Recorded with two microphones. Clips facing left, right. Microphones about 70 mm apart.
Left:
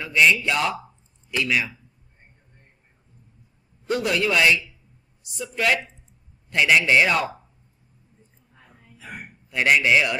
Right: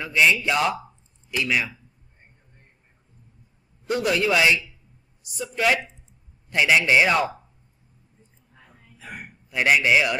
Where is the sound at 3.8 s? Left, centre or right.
Centre.